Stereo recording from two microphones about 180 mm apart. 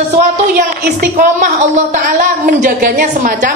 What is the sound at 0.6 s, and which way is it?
A woman's voice, 45° right (ahead or behind).